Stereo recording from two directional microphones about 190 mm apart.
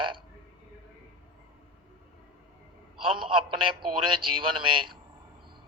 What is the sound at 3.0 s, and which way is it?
A man's voice, 25° right (ahead or behind).